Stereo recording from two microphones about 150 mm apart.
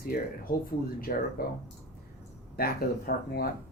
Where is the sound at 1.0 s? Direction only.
75° left (ahead or behind).